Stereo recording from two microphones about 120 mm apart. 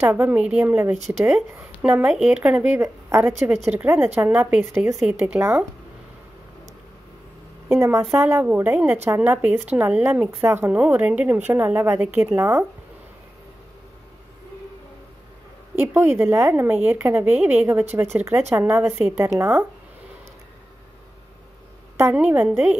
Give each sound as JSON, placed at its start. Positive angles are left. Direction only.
{"t": 0.0, "sound": "a woman's voice", "side_deg": -15}
{"t": 7.6, "sound": "a woman's voice", "side_deg": -20}
{"t": 15.8, "sound": "a woman's voice", "side_deg": -20}
{"t": 22.1, "sound": "a woman's voice", "side_deg": -15}